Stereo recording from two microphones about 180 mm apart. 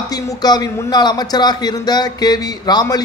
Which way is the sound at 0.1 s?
20° left (ahead or behind).